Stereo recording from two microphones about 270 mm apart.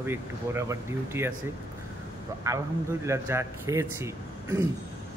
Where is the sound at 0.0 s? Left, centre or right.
Centre.